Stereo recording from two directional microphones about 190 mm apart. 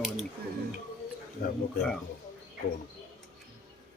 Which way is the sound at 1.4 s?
50° left (ahead or behind).